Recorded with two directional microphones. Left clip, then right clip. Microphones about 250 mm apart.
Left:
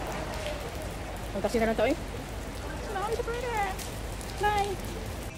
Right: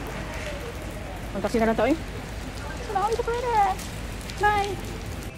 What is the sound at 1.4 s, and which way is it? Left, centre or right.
Speech, right.